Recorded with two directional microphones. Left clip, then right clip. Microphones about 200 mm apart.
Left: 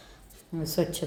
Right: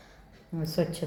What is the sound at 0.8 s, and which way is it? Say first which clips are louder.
Speech: left 1 dB; 10° left (ahead or behind).